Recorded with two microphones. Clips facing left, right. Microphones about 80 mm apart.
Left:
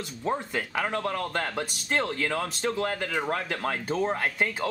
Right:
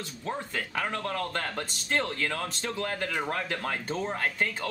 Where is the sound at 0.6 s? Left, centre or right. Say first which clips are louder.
Left 3 dB; centre.